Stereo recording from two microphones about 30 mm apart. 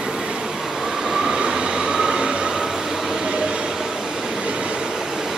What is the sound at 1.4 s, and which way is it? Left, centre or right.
Train, right.